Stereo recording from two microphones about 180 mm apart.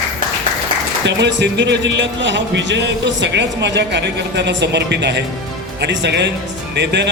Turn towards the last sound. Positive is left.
turn(degrees=-75)  # may be behind; listen again after turning